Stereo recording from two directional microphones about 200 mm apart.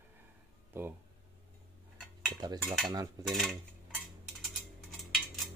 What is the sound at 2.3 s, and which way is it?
Stir, 20° right (ahead or behind).